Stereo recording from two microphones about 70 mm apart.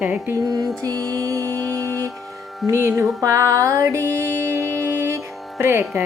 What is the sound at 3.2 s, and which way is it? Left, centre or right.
Music, right.